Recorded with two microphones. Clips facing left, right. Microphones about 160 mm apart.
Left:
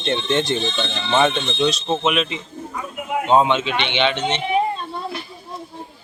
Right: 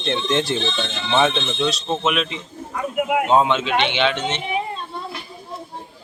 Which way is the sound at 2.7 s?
65° right (ahead or behind).